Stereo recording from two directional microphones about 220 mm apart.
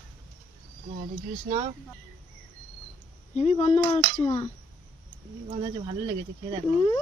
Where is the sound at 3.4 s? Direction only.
30° left (ahead or behind).